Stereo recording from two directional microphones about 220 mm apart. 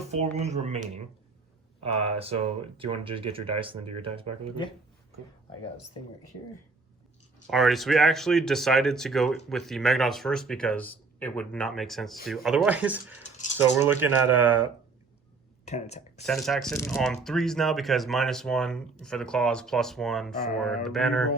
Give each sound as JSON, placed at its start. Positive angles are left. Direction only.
{"t": 0.1, "sound": "speech", "side_deg": -30}
{"t": 7.4, "sound": "speech", "side_deg": 0}
{"t": 15.6, "sound": "speech", "side_deg": 30}
{"t": 16.2, "sound": "speech", "side_deg": 0}
{"t": 16.7, "sound": "speech", "side_deg": 10}
{"t": 17.0, "sound": "speech", "side_deg": 0}